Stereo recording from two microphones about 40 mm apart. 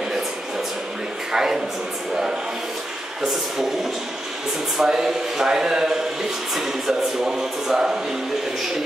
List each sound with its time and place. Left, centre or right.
1.3 s speech: centre
4.7 s speech: centre